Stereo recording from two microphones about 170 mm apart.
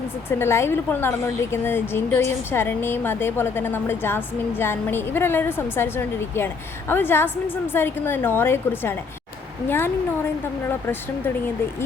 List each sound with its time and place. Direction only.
0.3 s a woman's voice: 15° left (ahead or behind)